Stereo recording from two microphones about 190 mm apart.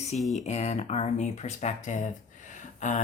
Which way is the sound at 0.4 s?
35° left (ahead or behind).